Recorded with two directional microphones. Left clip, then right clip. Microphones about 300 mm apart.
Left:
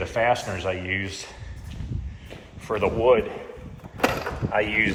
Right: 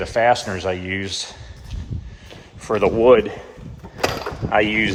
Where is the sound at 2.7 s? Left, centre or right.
Right.